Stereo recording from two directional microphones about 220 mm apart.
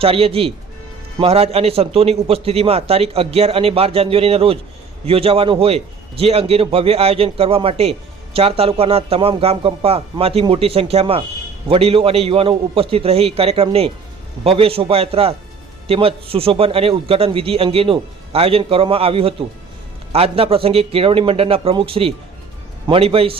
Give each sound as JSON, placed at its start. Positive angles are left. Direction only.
{"t": 0.0, "sound": "a man's voice", "side_deg": -25}